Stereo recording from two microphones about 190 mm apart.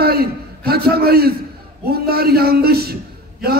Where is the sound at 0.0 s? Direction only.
55° right (ahead or behind).